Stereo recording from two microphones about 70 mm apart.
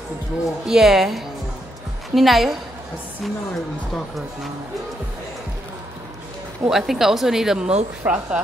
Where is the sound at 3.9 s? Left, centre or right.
Centre.